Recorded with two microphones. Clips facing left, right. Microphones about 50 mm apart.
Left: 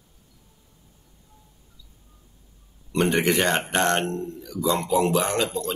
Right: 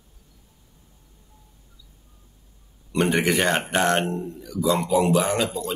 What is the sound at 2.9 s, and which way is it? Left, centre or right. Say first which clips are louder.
Speech: even; centre.